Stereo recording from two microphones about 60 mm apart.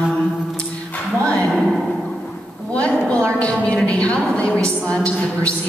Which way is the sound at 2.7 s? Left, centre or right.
Centre.